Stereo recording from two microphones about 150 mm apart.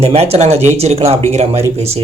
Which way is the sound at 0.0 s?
45° right (ahead or behind).